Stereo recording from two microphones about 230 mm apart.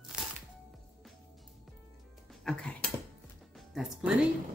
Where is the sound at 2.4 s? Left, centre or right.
Centre.